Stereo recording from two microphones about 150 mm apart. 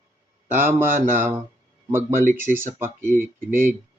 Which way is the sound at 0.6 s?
15° right (ahead or behind).